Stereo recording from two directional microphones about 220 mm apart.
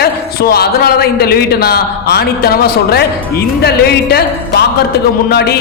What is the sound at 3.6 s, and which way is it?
A man's voice, 45° left (ahead or behind).